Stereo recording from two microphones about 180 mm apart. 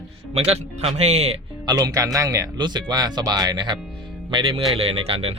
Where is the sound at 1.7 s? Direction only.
20° right (ahead or behind).